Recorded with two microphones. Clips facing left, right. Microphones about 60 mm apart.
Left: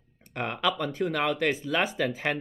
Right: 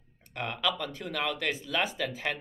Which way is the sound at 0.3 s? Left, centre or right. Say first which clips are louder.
Left 3 dB; left.